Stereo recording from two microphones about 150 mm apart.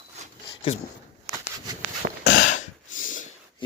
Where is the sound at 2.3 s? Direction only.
60° left (ahead or behind).